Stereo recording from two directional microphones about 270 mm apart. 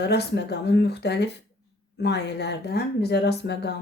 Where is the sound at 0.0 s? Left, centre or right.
Left.